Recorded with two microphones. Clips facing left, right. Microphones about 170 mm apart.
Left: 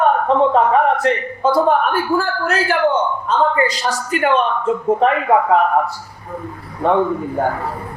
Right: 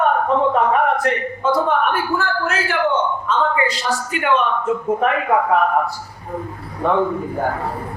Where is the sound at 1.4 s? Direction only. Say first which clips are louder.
Left 4 dB; 40° left (ahead or behind).